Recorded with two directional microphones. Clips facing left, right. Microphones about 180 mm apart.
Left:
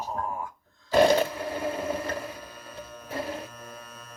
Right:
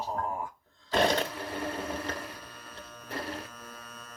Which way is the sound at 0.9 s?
5° left (ahead or behind).